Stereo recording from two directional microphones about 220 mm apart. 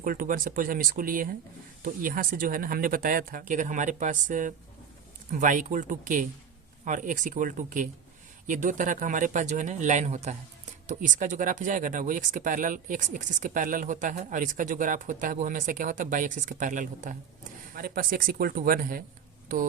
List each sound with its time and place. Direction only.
0.0 s speech: 40° right (ahead or behind)